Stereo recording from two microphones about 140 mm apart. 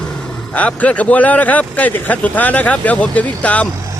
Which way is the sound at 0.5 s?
10° left (ahead or behind).